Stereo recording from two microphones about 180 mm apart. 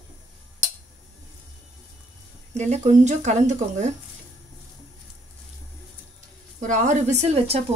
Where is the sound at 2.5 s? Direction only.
40° right (ahead or behind).